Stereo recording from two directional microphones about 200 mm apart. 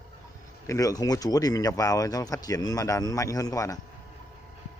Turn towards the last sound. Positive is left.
turn(degrees=15)  # may be behind; listen again after turning